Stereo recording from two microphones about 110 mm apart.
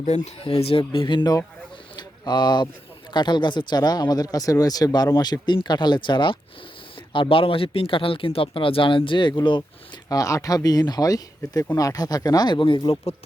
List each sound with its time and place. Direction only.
0.0 s speech: 90° left
0.4 s speech: 60° left (ahead or behind); by 1.4 s 45° left (ahead or behind)
2.0 s a sound: 40° left (ahead or behind)
3.1 s speech: 45° left (ahead or behind)
10.1 s speech: 30° left (ahead or behind); by 13.0 s 50° left (ahead or behind)